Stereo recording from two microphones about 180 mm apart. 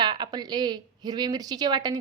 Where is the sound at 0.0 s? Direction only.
25° right (ahead or behind).